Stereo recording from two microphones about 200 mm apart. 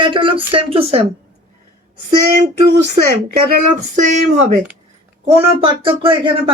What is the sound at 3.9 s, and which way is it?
Speech, 35° right (ahead or behind).